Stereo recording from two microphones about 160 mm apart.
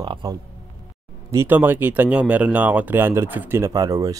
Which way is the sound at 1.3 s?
15° right (ahead or behind).